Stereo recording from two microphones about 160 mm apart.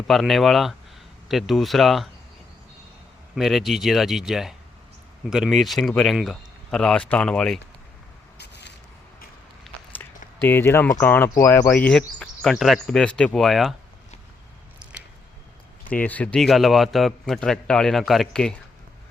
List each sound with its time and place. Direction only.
0.1 s speech: centre (ahead or behind)
3.3 s speech: centre (ahead or behind)
8.4 s a sound: 90° left
9.7 s a sound: centre (ahead or behind)
10.4 s speech: 15° left (ahead or behind)
15.9 s speech: 10° left (ahead or behind)